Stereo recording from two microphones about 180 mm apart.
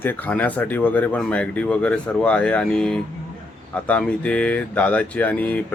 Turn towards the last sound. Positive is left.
turn(degrees=10)  # may be behind; listen again after turning